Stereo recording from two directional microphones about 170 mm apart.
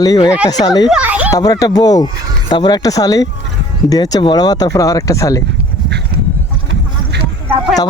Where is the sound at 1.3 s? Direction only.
20° left (ahead or behind).